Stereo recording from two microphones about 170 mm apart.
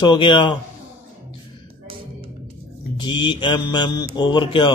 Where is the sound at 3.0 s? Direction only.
25° left (ahead or behind).